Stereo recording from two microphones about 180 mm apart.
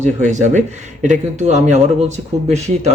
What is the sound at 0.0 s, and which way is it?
Speech, 40° right (ahead or behind).